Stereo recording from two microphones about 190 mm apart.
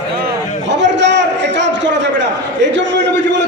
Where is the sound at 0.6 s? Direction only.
70° right (ahead or behind).